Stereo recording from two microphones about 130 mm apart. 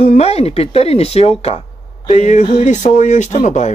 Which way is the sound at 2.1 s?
65° left (ahead or behind).